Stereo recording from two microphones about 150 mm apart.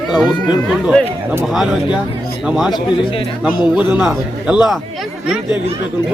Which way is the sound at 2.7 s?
35° left (ahead or behind).